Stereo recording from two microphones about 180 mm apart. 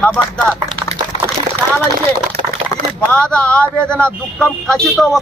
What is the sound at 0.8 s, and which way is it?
Typing, 25° right (ahead or behind).